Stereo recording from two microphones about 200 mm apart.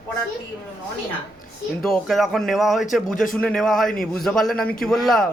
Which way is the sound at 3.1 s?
45° left (ahead or behind).